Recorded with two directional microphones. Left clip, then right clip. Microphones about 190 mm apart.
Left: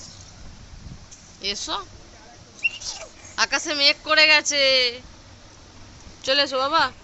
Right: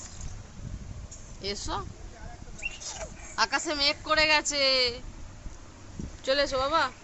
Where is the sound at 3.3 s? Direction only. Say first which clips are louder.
Left 5 dB; 10° left (ahead or behind).